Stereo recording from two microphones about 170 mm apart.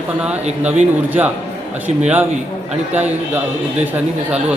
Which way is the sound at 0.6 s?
10° right (ahead or behind).